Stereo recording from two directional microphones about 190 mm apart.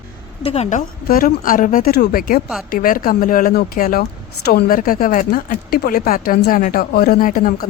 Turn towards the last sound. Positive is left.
turn(degrees=50)  # may be behind; listen again after turning